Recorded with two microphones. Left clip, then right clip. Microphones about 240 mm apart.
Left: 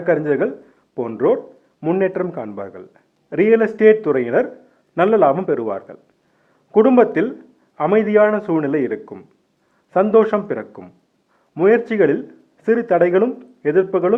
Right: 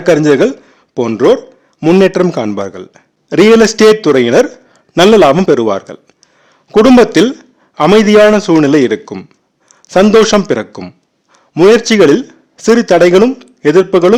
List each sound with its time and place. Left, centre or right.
0.0 s speech: right